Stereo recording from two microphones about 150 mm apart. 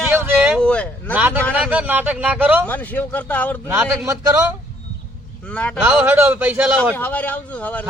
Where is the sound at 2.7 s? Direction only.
10° left (ahead or behind).